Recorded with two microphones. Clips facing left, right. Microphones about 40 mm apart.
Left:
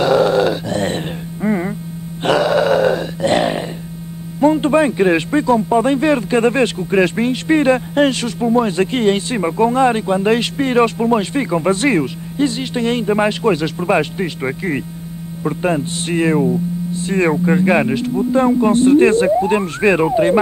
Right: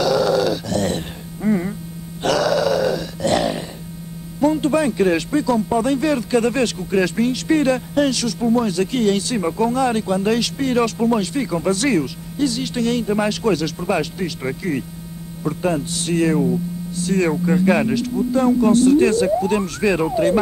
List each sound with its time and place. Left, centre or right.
0.0 s grunt: left
2.2 s a sound: left
4.4 s speech: left
15.4 s hum: left